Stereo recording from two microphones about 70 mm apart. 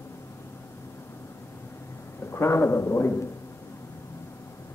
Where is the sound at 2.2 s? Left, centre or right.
Left.